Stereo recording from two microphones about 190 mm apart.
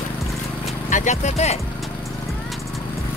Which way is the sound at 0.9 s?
40° left (ahead or behind).